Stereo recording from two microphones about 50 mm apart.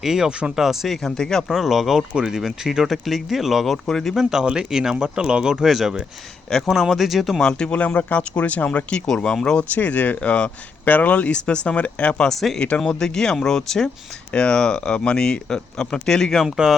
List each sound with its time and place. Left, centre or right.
0.0 s speech: centre
0.5 s speech: centre
1.0 s speech: centre
1.5 s speech: centre
4.4 s speech: centre
6.7 s speech: centre
7.4 s speech: centre
7.8 s speech: left
9.0 s speech: centre
9.6 s speech: left
11.3 s speech: left
12.3 s speech: centre
12.5 s speech: left
12.8 s speech: centre